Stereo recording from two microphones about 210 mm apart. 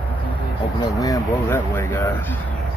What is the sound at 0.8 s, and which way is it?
Vehicle, 15° left (ahead or behind).